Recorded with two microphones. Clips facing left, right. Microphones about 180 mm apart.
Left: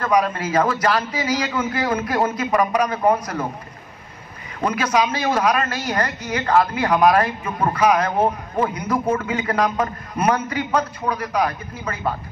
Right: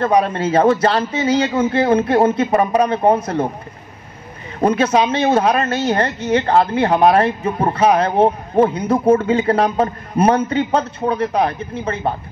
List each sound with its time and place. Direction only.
0.0 s speech: 30° right (ahead or behind)
4.6 s speech: 30° right (ahead or behind)